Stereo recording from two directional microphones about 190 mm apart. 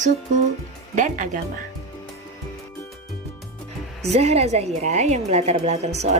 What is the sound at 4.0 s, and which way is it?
A woman's voice, 35° right (ahead or behind).